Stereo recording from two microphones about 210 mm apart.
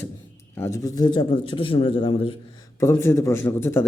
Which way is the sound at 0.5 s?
15° left (ahead or behind).